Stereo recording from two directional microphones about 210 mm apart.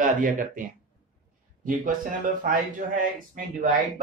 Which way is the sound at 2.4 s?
40° right (ahead or behind).